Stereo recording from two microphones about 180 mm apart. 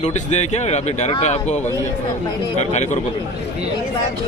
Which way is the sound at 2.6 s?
40° left (ahead or behind).